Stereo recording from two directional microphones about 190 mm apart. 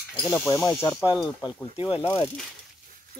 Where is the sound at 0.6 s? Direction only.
20° left (ahead or behind).